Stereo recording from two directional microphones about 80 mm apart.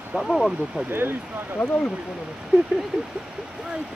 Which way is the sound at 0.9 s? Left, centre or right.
Right.